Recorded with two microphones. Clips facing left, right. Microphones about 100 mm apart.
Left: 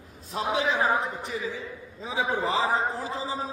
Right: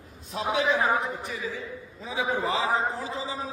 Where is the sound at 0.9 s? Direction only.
30° left (ahead or behind).